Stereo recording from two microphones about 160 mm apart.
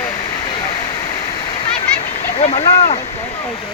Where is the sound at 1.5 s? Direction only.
35° left (ahead or behind).